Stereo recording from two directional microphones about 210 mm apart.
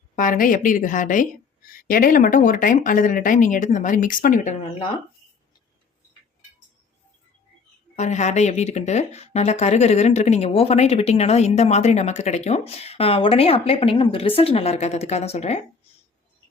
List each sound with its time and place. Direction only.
0.2 s speech: 40° left (ahead or behind)
7.9 s speech: 35° left (ahead or behind)